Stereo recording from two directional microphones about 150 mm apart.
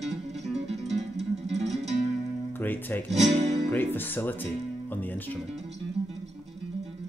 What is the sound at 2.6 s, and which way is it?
Speech, 10° left (ahead or behind).